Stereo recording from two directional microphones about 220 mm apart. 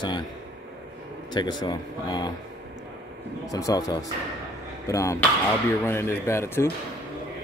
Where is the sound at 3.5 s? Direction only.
15° left (ahead or behind).